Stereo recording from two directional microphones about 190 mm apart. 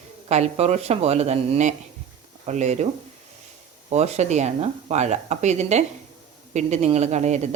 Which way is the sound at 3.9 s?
35° right (ahead or behind).